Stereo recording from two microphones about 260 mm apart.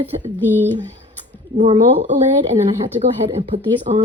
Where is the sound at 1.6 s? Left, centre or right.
Right.